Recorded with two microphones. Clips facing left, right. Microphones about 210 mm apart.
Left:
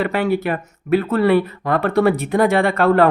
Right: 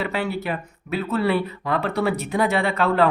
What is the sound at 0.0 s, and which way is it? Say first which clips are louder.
Speech: left 7 dB; 55° left (ahead or behind).